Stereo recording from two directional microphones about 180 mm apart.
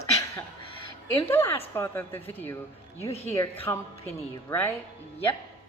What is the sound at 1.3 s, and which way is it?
A woman's voice, 15° left (ahead or behind).